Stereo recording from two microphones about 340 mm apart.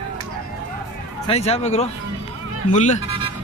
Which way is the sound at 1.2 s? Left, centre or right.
Centre.